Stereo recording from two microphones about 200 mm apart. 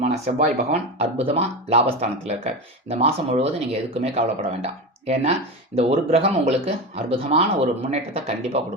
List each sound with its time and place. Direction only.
0.0 s speech: 35° right (ahead or behind)